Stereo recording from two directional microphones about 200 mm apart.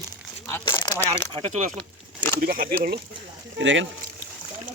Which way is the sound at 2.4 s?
45° right (ahead or behind).